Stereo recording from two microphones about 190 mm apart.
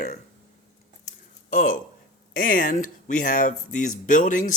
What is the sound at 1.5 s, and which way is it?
Speech, 45° left (ahead or behind).